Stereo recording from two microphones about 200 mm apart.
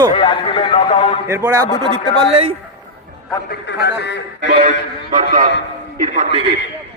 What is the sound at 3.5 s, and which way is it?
Speech, 60° left (ahead or behind).